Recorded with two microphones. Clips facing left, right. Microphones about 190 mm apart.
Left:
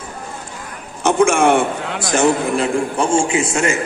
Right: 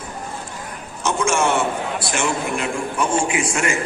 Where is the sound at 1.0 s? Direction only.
60° left (ahead or behind); by 2.0 s 75° left (ahead or behind).